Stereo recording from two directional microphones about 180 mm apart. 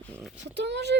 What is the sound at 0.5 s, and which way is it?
Speech, 70° right (ahead or behind).